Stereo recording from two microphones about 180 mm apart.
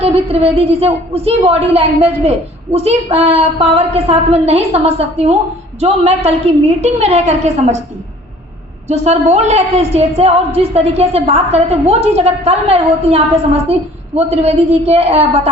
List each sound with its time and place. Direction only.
0.0 s a woman's voice: 35° right (ahead or behind)
8.9 s a woman's voice: 35° right (ahead or behind)